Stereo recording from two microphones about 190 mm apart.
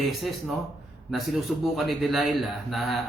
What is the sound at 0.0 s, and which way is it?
Speech, centre (ahead or behind).